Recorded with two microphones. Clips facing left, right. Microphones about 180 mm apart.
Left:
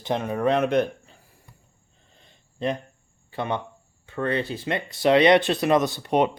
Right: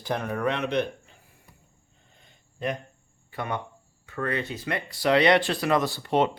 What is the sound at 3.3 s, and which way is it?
Speech, 25° left (ahead or behind).